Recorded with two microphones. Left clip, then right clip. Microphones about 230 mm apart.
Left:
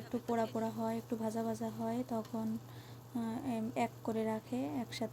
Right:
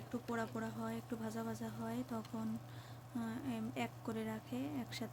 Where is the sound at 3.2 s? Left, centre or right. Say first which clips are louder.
Left 5 dB; centre.